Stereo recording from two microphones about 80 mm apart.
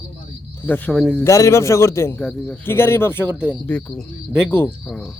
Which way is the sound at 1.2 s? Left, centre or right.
Left.